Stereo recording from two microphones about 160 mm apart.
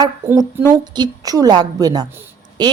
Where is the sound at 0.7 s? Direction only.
25° right (ahead or behind).